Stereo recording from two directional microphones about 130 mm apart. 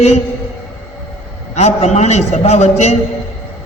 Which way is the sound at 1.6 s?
60° left (ahead or behind).